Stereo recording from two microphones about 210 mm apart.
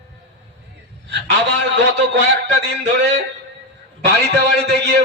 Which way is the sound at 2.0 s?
55° right (ahead or behind).